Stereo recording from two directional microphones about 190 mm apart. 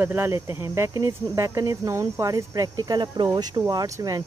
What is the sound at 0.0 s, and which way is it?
Speech, 10° right (ahead or behind).